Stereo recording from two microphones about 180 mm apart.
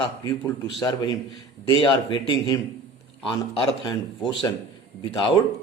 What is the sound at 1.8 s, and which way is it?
A man's voice, 25° left (ahead or behind).